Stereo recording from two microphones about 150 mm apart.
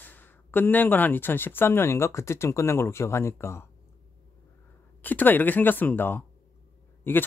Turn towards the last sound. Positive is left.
turn(degrees=15)  # may be behind; listen again after turning